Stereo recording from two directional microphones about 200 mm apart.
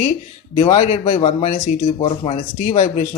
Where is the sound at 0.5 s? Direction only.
30° left (ahead or behind).